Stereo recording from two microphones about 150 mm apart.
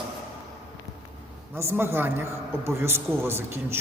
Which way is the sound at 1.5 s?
15° right (ahead or behind).